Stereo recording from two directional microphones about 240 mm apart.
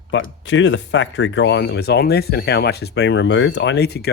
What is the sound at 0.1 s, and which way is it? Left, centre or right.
Speech, left.